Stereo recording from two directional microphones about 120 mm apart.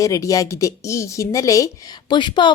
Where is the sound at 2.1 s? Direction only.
40° left (ahead or behind).